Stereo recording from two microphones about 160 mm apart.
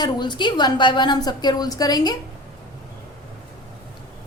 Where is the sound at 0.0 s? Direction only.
30° left (ahead or behind).